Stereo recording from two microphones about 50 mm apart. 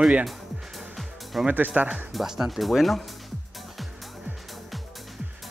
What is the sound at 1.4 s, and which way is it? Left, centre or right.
Speech, right.